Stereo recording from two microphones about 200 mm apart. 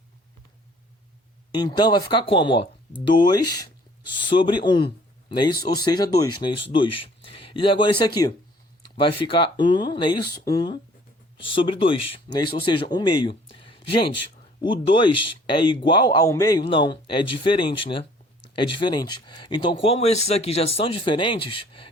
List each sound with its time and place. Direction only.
1.5 s speech: 20° left (ahead or behind)